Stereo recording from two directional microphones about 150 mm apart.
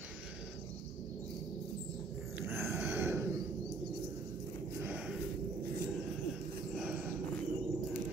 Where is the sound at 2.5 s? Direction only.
15° right (ahead or behind).